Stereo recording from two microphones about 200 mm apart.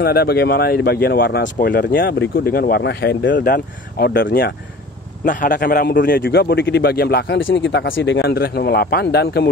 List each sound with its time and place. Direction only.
0.0 s speech: 50° left (ahead or behind)
5.2 s speech: 40° left (ahead or behind)